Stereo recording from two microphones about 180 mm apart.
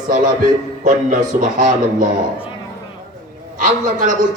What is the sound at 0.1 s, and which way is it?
A man's voice, 45° right (ahead or behind).